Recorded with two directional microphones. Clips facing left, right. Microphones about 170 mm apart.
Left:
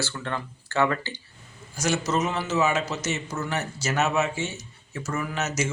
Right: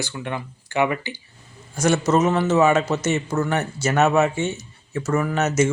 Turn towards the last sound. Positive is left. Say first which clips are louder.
# right 8 dB
turn(degrees=-55)  # may be behind; listen again after turning